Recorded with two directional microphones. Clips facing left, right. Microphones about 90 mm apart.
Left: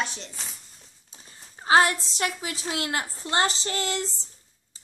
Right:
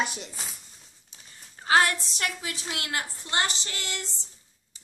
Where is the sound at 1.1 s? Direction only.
25° left (ahead or behind).